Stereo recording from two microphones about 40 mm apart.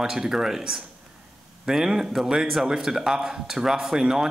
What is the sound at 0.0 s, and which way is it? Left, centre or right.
Speech, centre.